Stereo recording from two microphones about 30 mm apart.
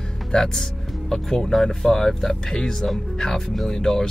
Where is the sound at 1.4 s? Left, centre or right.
Centre.